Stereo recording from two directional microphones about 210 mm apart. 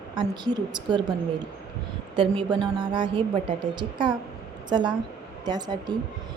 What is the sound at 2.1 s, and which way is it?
A woman's voice, 25° right (ahead or behind).